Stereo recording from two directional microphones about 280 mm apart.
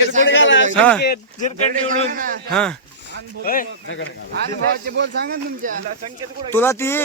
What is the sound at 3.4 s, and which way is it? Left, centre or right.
Speech, left.